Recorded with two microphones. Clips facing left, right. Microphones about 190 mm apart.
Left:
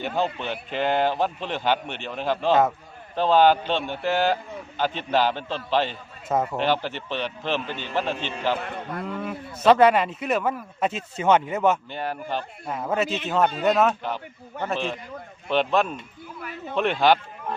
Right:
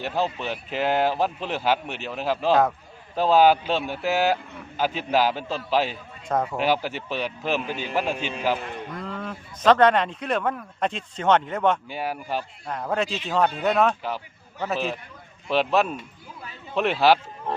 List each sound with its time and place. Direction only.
0.0 s a man's voice: 5° right (ahead or behind)
6.2 s a man's voice: 5° left (ahead or behind)
6.6 s a man's voice: 10° right (ahead or behind)
8.5 s a man's voice: 55° left (ahead or behind)
9.0 s a man's voice: 5° left (ahead or behind)
11.9 s a man's voice: 5° right (ahead or behind)
12.6 s a man's voice: 5° left (ahead or behind)